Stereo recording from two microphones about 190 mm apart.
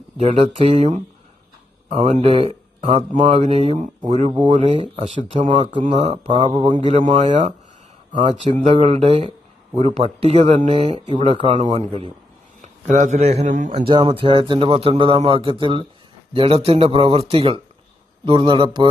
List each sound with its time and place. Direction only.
0.2 s speech: 35° right (ahead or behind)
7.0 s speech: 35° right (ahead or behind)